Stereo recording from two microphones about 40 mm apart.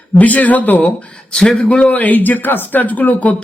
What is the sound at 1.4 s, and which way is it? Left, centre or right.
Speech, left.